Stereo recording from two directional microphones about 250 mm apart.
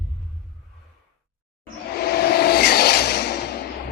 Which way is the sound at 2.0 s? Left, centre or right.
Left.